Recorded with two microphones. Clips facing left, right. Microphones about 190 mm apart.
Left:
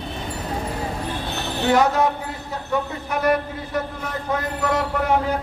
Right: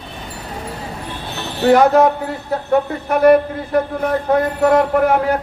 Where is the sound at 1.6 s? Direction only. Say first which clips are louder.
Right 7 dB; 55° right (ahead or behind).